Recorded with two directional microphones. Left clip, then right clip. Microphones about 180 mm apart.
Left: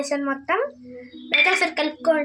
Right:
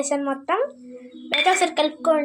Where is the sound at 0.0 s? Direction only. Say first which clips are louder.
Right 1 dB; 25° right (ahead or behind).